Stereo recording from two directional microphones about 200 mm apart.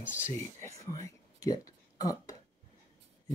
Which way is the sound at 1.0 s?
15° left (ahead or behind).